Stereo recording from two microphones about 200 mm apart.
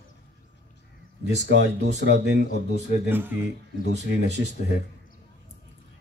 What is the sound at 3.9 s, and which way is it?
Speech, 35° left (ahead or behind).